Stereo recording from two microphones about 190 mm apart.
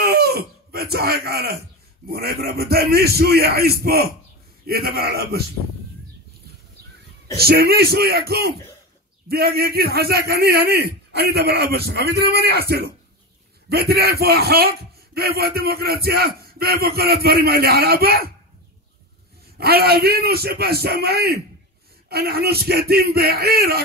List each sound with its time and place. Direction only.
0.0 s speech: 55° right (ahead or behind)
7.3 s speech: 55° right (ahead or behind)
19.6 s speech: 55° right (ahead or behind)